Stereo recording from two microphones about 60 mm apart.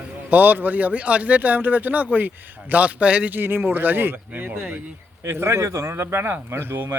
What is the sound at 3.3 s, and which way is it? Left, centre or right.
Speech, right.